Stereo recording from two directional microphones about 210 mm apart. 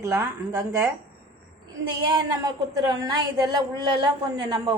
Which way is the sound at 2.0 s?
20° right (ahead or behind).